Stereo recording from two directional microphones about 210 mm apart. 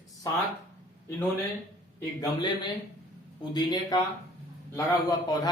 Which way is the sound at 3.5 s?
20° left (ahead or behind).